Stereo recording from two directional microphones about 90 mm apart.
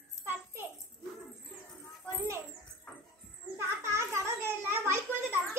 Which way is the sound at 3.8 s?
30° right (ahead or behind).